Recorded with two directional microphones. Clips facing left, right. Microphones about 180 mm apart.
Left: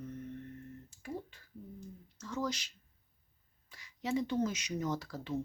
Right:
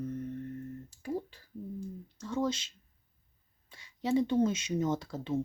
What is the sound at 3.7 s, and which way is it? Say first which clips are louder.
Speech: right 6 dB; 30° right (ahead or behind).